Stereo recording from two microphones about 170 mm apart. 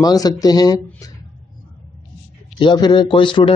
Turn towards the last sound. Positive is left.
turn(degrees=30)  # may be behind; listen again after turning